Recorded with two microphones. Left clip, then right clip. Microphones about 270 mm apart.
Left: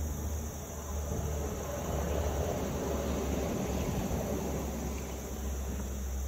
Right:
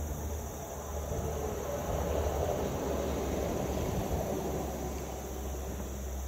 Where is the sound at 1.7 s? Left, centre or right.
Right.